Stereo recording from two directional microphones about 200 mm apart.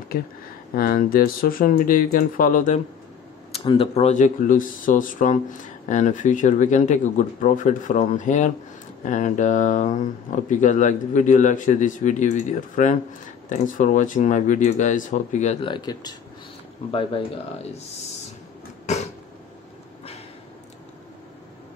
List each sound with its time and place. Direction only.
0.7 s speech: 45° left (ahead or behind)
3.5 s speech: 30° left (ahead or behind)
15.7 s speech: 20° left (ahead or behind)